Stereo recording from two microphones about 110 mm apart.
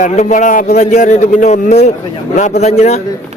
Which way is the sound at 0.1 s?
90° left.